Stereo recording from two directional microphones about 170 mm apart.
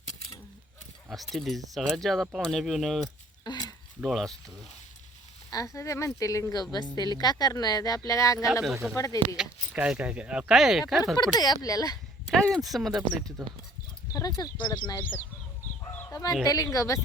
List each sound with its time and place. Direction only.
1.1 s speech: centre (ahead or behind)
3.4 s a sound: 25° left (ahead or behind)
4.0 s speech: centre (ahead or behind)
5.5 s speech: 20° left (ahead or behind)
8.6 s speech: centre (ahead or behind)
11.2 s speech: 25° left (ahead or behind)
12.3 s speech: centre (ahead or behind)
14.1 s speech: 20° left (ahead or behind)
15.9 s fowl: 10° left (ahead or behind)
16.4 s speech: 20° left (ahead or behind)